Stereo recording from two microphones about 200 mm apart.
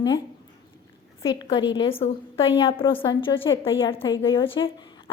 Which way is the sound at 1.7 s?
25° left (ahead or behind).